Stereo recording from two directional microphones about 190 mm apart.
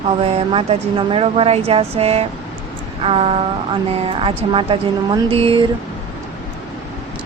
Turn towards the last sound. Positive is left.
turn(degrees=-30)  # may be behind; listen again after turning